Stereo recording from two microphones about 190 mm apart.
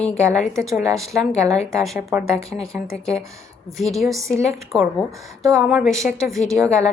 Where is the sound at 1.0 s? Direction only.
5° left (ahead or behind).